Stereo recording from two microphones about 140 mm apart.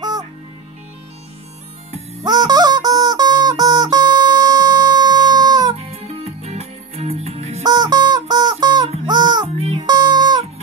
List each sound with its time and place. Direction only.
0.0 s music: 30° right (ahead or behind)
2.2 s music: 30° right (ahead or behind)
5.8 s music: 45° right (ahead or behind)
7.6 s music: 30° right (ahead or behind)
9.6 s music: 45° right (ahead or behind)
9.8 s music: 30° right (ahead or behind)